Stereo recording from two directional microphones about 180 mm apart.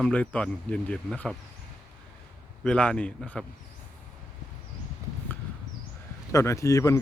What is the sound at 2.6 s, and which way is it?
Speech, 5° left (ahead or behind).